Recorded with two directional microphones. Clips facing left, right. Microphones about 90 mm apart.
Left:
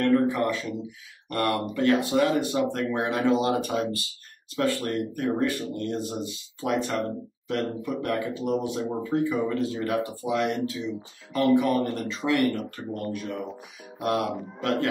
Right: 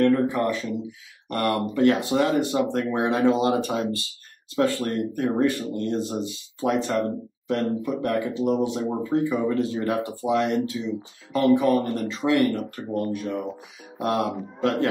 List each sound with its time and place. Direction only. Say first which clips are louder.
0.0 s a man's voice: right 2 dB; 25° right (ahead or behind)